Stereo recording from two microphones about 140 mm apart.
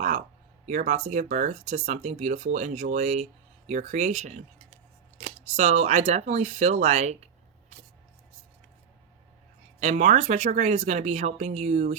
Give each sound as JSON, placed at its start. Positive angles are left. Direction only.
{"t": 0.7, "sound": "speech", "side_deg": -60}
{"t": 9.8, "sound": "speech", "side_deg": -60}